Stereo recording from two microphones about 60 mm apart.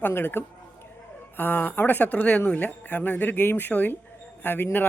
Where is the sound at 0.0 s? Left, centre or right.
Left.